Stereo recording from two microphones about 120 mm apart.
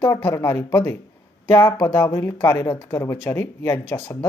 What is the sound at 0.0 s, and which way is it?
Speech, 20° left (ahead or behind).